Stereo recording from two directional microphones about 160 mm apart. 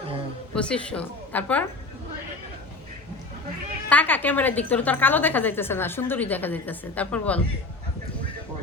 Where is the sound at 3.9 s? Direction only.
10° left (ahead or behind).